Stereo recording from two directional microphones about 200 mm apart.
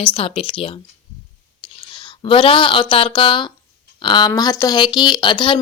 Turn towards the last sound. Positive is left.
turn(degrees=25)  # may be behind; listen again after turning